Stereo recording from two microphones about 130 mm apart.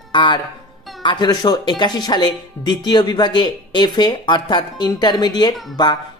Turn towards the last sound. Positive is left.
turn(degrees=35)  # may be behind; listen again after turning